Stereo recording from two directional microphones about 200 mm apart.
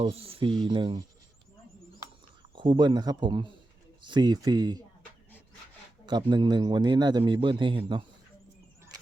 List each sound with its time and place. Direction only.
0.0 s a man's voice: 30° right (ahead or behind)
2.6 s a man's voice: 25° right (ahead or behind)
6.1 s a man's voice: 20° right (ahead or behind)